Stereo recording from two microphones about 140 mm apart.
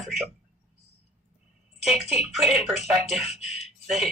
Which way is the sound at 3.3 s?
50° left (ahead or behind).